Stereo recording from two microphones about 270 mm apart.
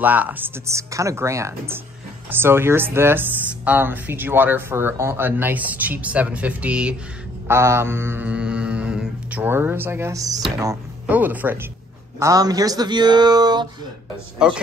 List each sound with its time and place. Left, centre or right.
0.0 s speech: centre
14.4 s a man's voice: centre